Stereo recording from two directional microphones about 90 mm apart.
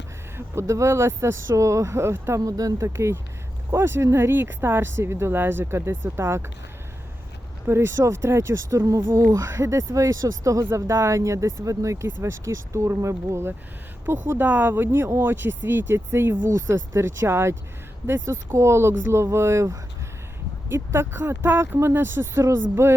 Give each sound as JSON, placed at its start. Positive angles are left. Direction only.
{"t": 0.3, "sound": "speech", "side_deg": -30}
{"t": 2.4, "sound": "speech", "side_deg": -40}
{"t": 7.7, "sound": "speech", "side_deg": -30}